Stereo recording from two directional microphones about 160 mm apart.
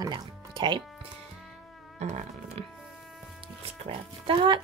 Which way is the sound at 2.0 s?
45° right (ahead or behind).